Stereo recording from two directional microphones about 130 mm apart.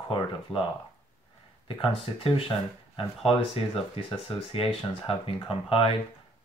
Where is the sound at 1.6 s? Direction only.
45° left (ahead or behind).